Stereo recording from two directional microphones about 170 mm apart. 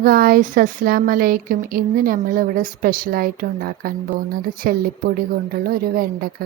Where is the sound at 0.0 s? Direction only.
60° right (ahead or behind).